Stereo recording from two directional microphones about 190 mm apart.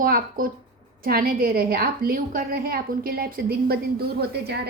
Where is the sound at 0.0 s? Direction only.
50° right (ahead or behind).